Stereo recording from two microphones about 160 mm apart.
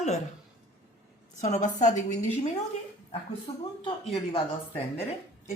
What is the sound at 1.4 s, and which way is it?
A woman's voice, 45° left (ahead or behind).